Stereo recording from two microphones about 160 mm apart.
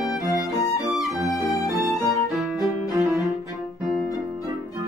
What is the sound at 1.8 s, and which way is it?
Music, centre (ahead or behind).